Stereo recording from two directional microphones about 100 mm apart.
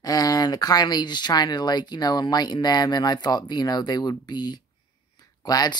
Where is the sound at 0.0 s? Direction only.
40° left (ahead or behind).